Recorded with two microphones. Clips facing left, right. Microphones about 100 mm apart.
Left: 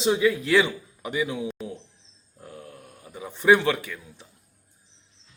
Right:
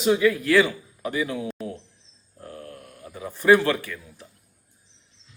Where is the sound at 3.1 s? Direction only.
20° left (ahead or behind).